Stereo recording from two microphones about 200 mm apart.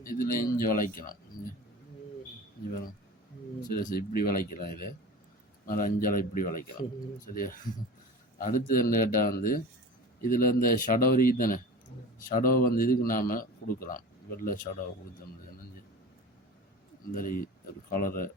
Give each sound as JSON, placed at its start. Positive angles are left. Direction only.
{"t": 0.0, "sound": "a man's voice", "side_deg": 45}
{"t": 3.7, "sound": "a man's voice", "side_deg": 50}
{"t": 17.2, "sound": "a man's voice", "side_deg": 45}